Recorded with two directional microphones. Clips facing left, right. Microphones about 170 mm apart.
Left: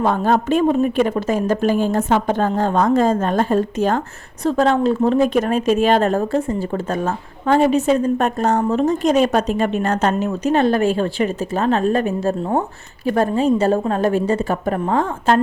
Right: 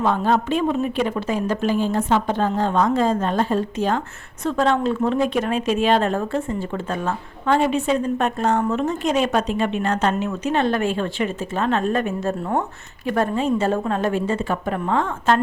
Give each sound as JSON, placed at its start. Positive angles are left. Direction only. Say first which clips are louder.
{"t": 0.0, "sound": "a woman's voice", "louder": "left 2 dB", "side_deg": 45}